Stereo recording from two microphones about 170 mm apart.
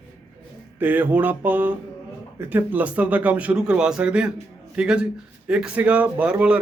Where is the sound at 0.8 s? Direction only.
10° right (ahead or behind).